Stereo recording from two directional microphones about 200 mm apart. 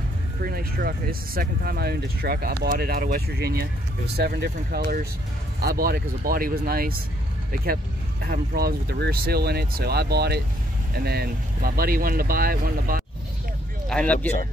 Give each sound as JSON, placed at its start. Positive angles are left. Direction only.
{"t": 0.4, "sound": "speech", "side_deg": -50}
{"t": 13.8, "sound": "speech", "side_deg": 5}